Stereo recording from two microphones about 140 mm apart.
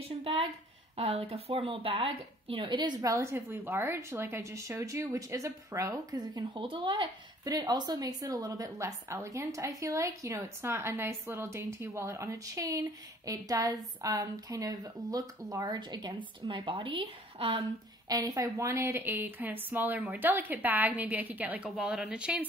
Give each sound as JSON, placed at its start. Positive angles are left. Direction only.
{"t": 0.2, "sound": "a woman's voice", "side_deg": -40}